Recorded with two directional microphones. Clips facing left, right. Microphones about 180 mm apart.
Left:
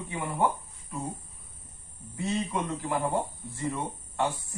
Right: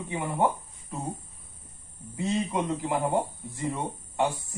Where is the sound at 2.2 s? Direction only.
15° right (ahead or behind).